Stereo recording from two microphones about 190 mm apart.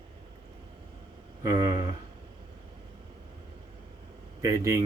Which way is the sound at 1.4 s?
20° right (ahead or behind).